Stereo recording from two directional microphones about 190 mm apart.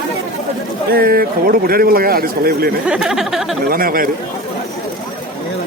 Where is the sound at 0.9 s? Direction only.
50° right (ahead or behind).